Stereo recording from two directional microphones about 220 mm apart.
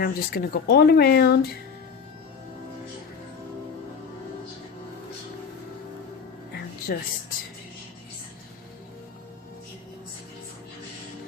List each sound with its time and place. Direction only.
0.0 s speech: 45° left (ahead or behind)
6.5 s music: 45° left (ahead or behind)